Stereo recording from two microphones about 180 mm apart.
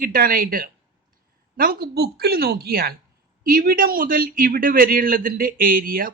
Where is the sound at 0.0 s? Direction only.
55° right (ahead or behind).